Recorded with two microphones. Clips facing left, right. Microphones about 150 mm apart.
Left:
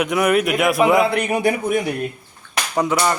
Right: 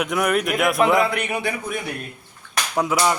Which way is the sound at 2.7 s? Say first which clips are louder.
Left 1 dB; 5° right (ahead or behind).